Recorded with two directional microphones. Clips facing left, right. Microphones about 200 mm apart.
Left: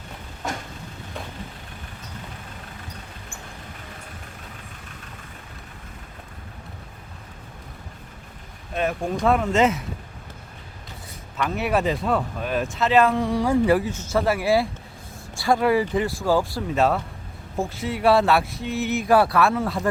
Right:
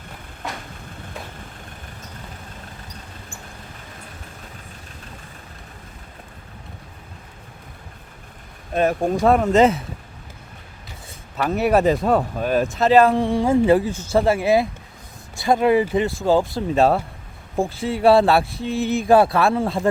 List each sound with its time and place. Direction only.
8.7 s speech: 40° right (ahead or behind)
11.3 s speech: 40° right (ahead or behind)